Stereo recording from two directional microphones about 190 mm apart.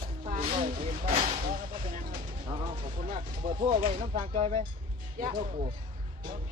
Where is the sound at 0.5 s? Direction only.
30° right (ahead or behind).